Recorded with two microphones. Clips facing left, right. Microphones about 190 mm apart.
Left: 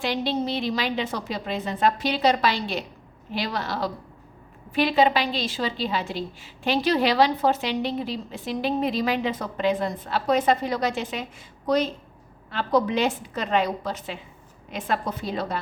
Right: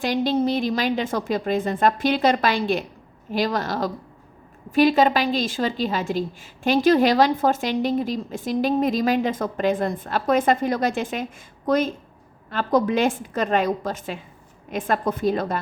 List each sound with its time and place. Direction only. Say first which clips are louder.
0.0 s a woman's voice: right 5 dB; 45° right (ahead or behind)